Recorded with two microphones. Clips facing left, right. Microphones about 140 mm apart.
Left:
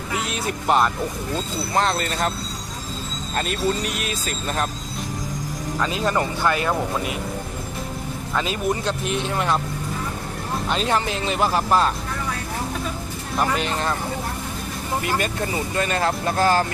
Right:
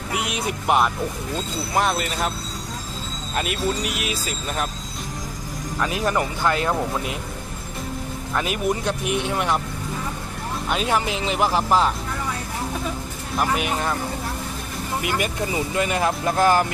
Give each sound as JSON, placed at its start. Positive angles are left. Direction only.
{"t": 0.2, "sound": "speech", "side_deg": -15}
{"t": 3.3, "sound": "speech", "side_deg": -10}
{"t": 5.8, "sound": "speech", "side_deg": -15}
{"t": 8.4, "sound": "speech", "side_deg": -15}
{"t": 10.7, "sound": "speech", "side_deg": -10}
{"t": 13.4, "sound": "speech", "side_deg": -10}
{"t": 15.0, "sound": "speech", "side_deg": -15}